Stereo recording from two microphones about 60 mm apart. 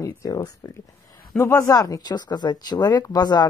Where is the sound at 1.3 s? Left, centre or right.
Left.